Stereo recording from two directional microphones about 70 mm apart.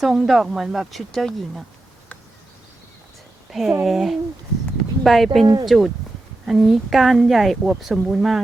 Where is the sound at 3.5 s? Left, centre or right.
Centre.